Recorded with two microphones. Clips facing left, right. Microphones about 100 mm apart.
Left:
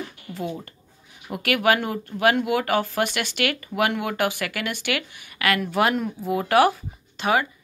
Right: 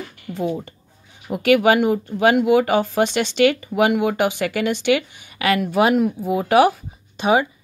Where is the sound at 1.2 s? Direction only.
25° right (ahead or behind).